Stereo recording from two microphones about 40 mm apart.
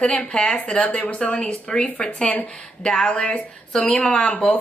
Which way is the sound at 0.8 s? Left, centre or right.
Left.